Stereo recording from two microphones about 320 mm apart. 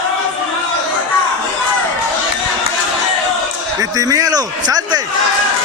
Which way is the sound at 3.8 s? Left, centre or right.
Centre.